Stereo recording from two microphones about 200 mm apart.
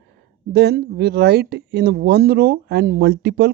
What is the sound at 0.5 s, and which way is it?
Speech, 55° right (ahead or behind).